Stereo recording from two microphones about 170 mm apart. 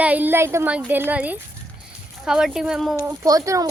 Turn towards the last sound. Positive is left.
turn(degrees=-20)  # may be behind; listen again after turning